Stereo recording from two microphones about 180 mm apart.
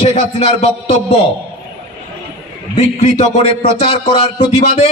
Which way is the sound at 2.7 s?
35° left (ahead or behind).